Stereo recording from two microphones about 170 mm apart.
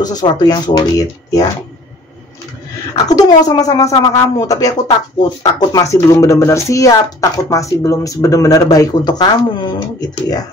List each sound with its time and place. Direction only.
0.0 s speech: 25° left (ahead or behind)
3.1 s speech: 20° left (ahead or behind)